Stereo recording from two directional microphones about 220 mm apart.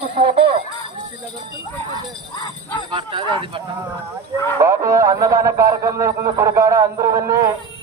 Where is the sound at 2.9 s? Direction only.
20° right (ahead or behind).